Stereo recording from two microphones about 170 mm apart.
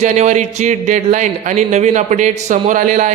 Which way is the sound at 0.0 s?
45° right (ahead or behind).